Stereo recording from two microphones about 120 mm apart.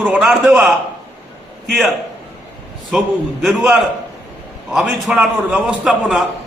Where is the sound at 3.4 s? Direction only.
5° right (ahead or behind).